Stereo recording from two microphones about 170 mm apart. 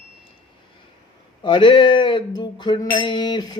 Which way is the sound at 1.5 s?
30° left (ahead or behind).